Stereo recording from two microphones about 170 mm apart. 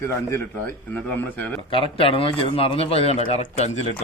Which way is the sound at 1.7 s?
30° left (ahead or behind).